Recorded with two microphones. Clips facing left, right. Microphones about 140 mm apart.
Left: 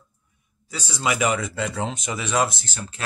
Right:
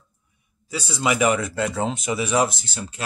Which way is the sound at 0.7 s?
5° right (ahead or behind).